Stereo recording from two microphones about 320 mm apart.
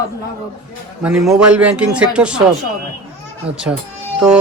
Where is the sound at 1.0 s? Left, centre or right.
Centre.